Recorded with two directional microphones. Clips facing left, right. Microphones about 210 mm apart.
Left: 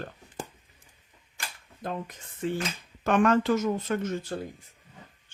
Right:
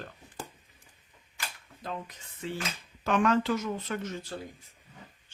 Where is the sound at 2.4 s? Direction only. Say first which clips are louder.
Left 6 dB; 50° left (ahead or behind).